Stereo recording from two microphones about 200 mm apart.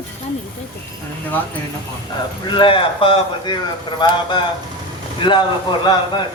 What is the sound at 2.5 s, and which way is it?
A man's voice, 25° left (ahead or behind).